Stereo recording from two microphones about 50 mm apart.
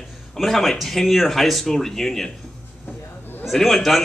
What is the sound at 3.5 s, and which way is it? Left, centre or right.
Speech, centre.